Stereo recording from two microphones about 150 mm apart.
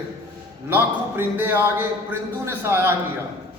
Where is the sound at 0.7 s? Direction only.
15° right (ahead or behind).